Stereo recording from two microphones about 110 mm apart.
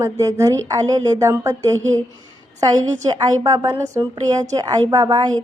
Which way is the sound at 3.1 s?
35° right (ahead or behind).